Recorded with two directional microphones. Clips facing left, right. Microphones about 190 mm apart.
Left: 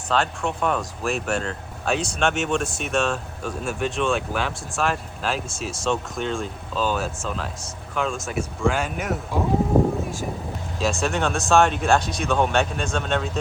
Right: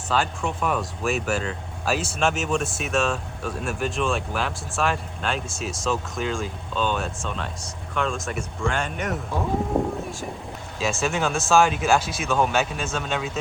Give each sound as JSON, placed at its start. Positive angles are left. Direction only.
{"t": 0.1, "sound": "speech", "side_deg": 0}
{"t": 9.7, "sound": "a sound", "side_deg": 0}
{"t": 10.8, "sound": "speech", "side_deg": 0}